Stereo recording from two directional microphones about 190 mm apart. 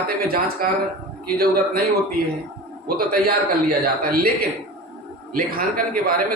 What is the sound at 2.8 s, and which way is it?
A man's voice, 55° right (ahead or behind).